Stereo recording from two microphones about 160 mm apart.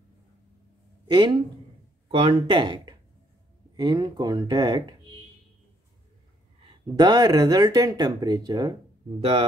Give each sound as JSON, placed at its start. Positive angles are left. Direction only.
{"t": 1.0, "sound": "speech", "side_deg": -25}
{"t": 7.0, "sound": "speech", "side_deg": -25}